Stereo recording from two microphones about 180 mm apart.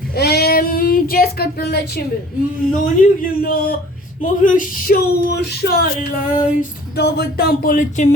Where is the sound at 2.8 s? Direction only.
50° left (ahead or behind).